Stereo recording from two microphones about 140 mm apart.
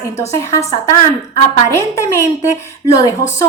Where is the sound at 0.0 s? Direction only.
20° left (ahead or behind).